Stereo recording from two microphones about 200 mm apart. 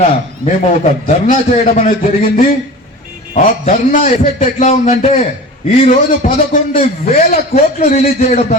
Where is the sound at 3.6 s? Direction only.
35° left (ahead or behind).